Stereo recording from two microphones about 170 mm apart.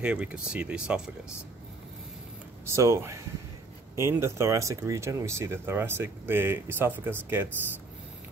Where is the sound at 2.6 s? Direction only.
15° right (ahead or behind).